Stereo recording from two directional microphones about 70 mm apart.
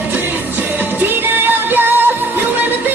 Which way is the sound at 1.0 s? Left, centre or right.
Right.